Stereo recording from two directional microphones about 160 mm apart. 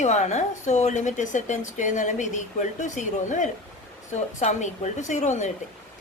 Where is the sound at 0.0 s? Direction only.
45° left (ahead or behind).